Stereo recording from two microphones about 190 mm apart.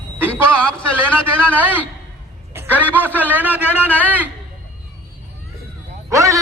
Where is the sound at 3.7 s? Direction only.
10° left (ahead or behind).